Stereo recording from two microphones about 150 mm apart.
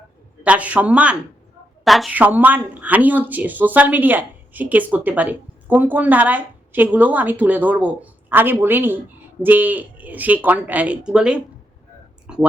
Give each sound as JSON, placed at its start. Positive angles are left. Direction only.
{"t": 0.4, "sound": "a woman's voice", "side_deg": -10}
{"t": 2.1, "sound": "a woman's voice", "side_deg": -10}
{"t": 12.3, "sound": "a sound", "side_deg": -5}